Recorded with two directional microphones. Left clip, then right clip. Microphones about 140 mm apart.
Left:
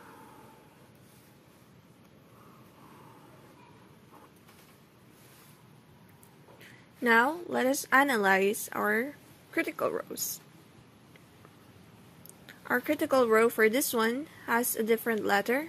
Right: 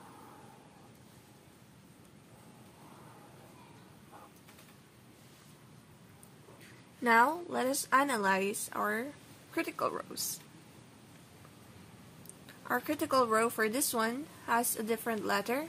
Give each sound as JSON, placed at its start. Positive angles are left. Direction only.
{"t": 7.0, "sound": "a woman's voice", "side_deg": 20}
{"t": 12.6, "sound": "a woman's voice", "side_deg": 20}